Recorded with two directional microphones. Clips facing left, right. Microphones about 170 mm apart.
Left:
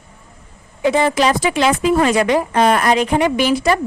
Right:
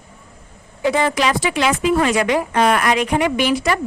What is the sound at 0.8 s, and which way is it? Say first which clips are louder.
Speech: left 3 dB; 25° left (ahead or behind).